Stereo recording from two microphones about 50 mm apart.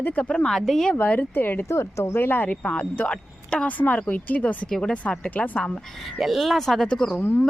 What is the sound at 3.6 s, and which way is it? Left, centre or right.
Speech, left.